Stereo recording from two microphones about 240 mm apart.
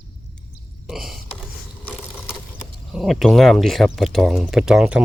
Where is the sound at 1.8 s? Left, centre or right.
Centre.